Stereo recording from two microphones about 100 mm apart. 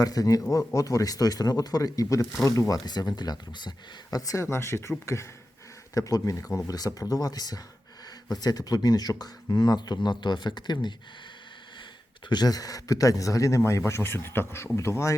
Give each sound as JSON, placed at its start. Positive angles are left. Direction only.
{"t": 0.0, "sound": "speech", "side_deg": 35}
{"t": 12.3, "sound": "speech", "side_deg": 40}